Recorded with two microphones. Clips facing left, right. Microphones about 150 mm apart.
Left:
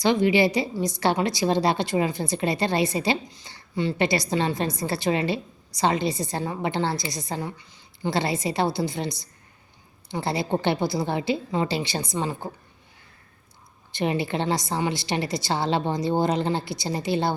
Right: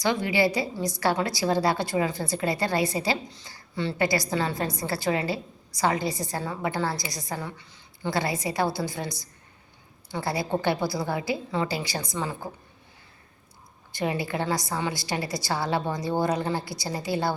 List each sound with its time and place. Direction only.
0.0 s a woman's voice: 25° left (ahead or behind)
13.9 s a woman's voice: 25° left (ahead or behind)